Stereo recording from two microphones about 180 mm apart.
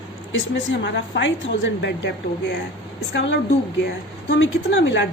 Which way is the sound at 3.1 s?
90° left.